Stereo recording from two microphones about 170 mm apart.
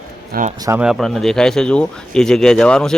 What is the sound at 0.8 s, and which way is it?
Speech, centre (ahead or behind).